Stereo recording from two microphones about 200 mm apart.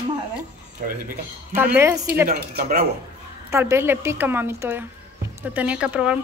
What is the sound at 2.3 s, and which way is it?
Speech, 50° right (ahead or behind).